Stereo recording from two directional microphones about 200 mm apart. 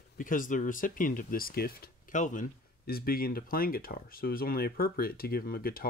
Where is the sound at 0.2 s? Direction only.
40° left (ahead or behind).